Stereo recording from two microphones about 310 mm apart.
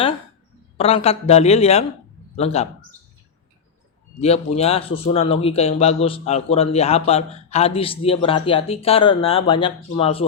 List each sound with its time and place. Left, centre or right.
0.8 s speech: centre
4.2 s speech: centre